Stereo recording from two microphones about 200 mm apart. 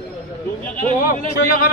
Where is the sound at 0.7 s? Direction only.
45° left (ahead or behind).